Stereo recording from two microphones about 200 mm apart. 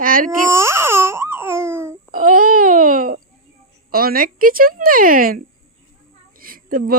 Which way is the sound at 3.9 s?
45° right (ahead or behind).